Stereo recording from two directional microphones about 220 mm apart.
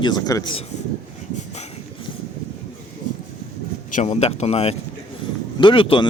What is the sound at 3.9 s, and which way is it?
Speech, 30° left (ahead or behind).